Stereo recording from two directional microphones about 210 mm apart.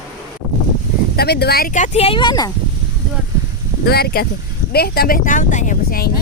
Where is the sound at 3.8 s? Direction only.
50° left (ahead or behind).